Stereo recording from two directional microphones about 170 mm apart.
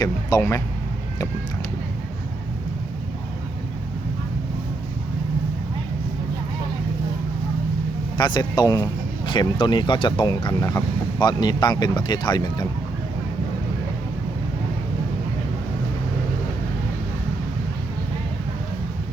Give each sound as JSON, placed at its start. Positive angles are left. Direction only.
{"t": 0.0, "sound": "a man's voice", "side_deg": 20}
{"t": 8.2, "sound": "a man's voice", "side_deg": 25}